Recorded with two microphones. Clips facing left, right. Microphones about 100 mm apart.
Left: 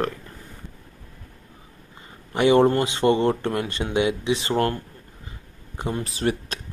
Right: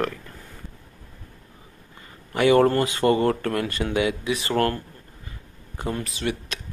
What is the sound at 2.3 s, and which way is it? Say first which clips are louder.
Speech: even; 25° left (ahead or behind).